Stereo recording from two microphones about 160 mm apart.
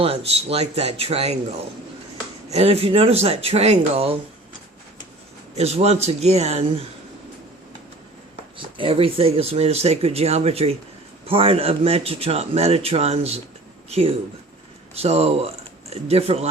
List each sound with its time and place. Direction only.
0.0 s speech: 35° right (ahead or behind)
2.5 s speech: 40° right (ahead or behind)
5.5 s speech: 40° right (ahead or behind)
8.5 s speech: 35° right (ahead or behind)
14.9 s speech: 40° right (ahead or behind)